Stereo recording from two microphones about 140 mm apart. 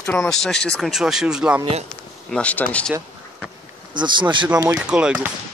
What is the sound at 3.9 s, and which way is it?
Speech, 35° right (ahead or behind).